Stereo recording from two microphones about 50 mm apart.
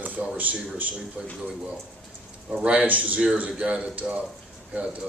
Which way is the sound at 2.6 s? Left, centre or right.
Right.